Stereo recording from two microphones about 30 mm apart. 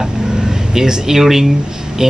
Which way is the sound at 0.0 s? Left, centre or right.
Centre.